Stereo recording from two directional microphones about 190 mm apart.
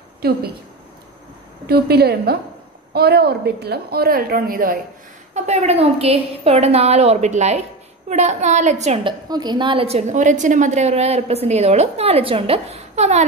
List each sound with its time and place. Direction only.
0.2 s a woman's voice: 55° right (ahead or behind)
1.7 s a woman's voice: 55° right (ahead or behind)
5.3 s a woman's voice: 35° right (ahead or behind)
9.3 s a woman's voice: 20° right (ahead or behind)